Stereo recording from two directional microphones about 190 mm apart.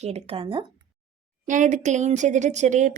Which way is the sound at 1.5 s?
40° right (ahead or behind).